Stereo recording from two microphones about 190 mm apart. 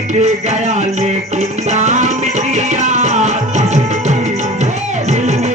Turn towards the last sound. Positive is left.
turn(degrees=-35)  # may be behind; listen again after turning